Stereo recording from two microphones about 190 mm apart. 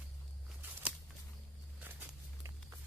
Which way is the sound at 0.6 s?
10° right (ahead or behind).